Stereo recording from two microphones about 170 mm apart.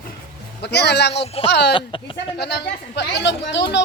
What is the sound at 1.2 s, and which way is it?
Speech, 35° left (ahead or behind).